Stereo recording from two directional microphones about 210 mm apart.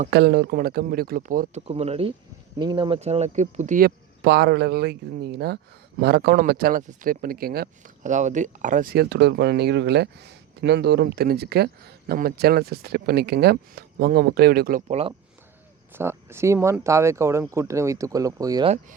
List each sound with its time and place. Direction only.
0.1 s speech: 55° right (ahead or behind)
1.6 s speech: 30° right (ahead or behind)
15.9 s speech: 10° right (ahead or behind)